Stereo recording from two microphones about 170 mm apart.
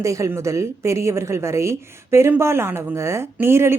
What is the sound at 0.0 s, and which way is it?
A woman's voice, 20° right (ahead or behind).